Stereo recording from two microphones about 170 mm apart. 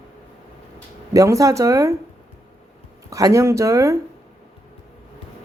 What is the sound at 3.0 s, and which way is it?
Speech, 20° right (ahead or behind).